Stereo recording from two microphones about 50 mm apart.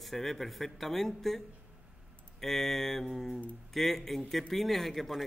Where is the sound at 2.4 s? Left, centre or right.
Centre.